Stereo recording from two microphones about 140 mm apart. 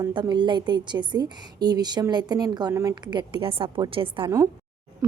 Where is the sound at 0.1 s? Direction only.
35° right (ahead or behind).